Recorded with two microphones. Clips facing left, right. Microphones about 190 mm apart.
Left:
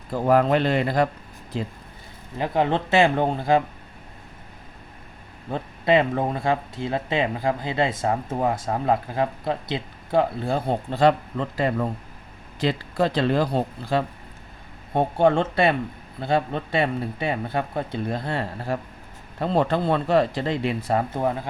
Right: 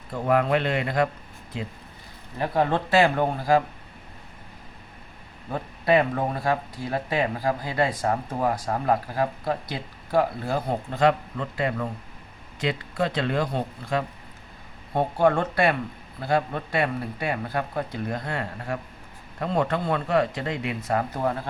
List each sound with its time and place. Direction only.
0.1 s speech: 35° left (ahead or behind)
2.4 s speech: 20° left (ahead or behind)
5.5 s speech: 25° left (ahead or behind)